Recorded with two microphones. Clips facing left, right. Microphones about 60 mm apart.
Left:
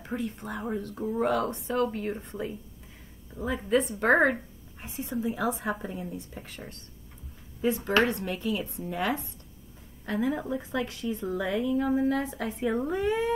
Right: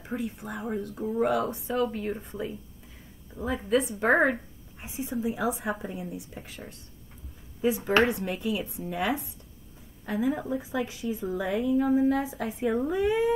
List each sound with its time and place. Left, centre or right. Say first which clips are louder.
0.0 s a woman's voice: even; centre
4.8 s a woman's voice: right 1 dB; centre
6.3 s a woman's voice: even; centre
7.9 s a woman's voice: right 2 dB; centre
13.0 s a woman's voice: right 4 dB; centre